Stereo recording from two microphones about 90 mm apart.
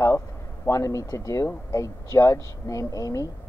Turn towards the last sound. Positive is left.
turn(degrees=40)  # may be behind; listen again after turning